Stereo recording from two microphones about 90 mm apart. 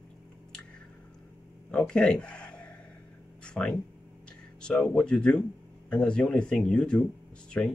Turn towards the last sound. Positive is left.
turn(degrees=20)  # may be behind; listen again after turning